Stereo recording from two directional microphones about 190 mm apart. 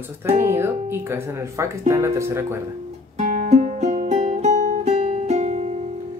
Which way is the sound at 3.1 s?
40° right (ahead or behind).